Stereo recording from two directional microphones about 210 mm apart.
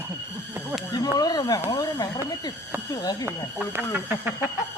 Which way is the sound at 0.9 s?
20° left (ahead or behind).